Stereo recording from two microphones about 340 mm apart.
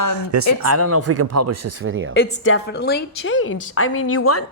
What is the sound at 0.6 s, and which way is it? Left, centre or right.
Speech, right.